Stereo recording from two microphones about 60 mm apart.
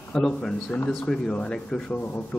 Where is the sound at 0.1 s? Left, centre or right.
Centre.